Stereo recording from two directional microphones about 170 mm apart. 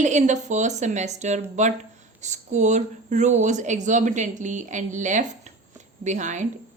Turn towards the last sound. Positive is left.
turn(degrees=-45)  # may be behind; listen again after turning